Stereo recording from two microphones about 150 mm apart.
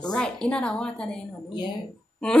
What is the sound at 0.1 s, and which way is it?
Speech, 5° left (ahead or behind).